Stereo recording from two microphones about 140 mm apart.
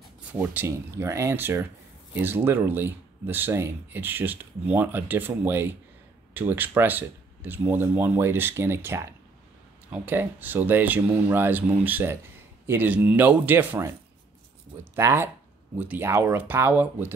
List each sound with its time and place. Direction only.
0.3 s speech: 10° right (ahead or behind)
15.0 s speech: 20° right (ahead or behind)